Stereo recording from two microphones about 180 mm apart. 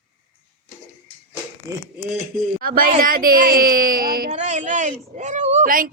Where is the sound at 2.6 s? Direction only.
50° right (ahead or behind).